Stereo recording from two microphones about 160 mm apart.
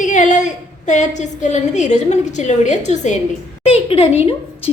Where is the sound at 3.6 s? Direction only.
40° left (ahead or behind).